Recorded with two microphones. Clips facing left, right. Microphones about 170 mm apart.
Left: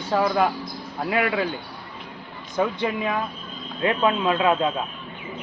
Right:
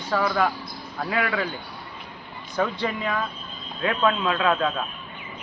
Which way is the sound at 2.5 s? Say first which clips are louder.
Left 2 dB; 20° left (ahead or behind).